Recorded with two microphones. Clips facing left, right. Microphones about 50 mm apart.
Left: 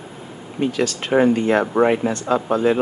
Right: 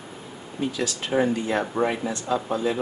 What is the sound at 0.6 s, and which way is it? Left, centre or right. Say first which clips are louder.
Speech: left 6 dB; left.